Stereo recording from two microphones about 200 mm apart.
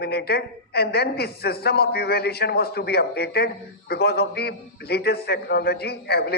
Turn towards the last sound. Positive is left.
turn(degrees=55)  # may be behind; listen again after turning